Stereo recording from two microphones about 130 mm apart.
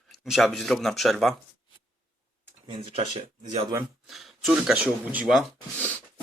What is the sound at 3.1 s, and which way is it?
Speech, 65° right (ahead or behind).